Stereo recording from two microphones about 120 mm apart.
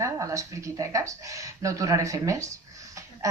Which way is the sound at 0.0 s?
25° right (ahead or behind).